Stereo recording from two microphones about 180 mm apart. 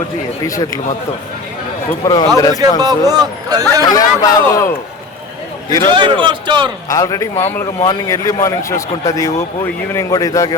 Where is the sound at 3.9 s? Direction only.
20° left (ahead or behind).